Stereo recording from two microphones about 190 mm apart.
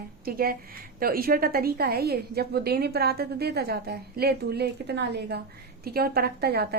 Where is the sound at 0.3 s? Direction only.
50° right (ahead or behind).